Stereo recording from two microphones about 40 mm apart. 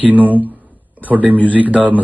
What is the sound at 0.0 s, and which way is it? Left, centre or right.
Speech, right.